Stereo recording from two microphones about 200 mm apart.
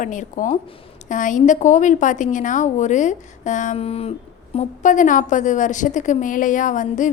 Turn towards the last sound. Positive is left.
turn(degrees=40)  # may be behind; listen again after turning